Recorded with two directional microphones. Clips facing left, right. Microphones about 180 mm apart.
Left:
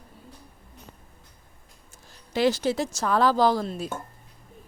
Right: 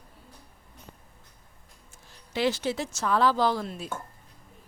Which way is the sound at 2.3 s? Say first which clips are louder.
Left 4 dB; 40° left (ahead or behind).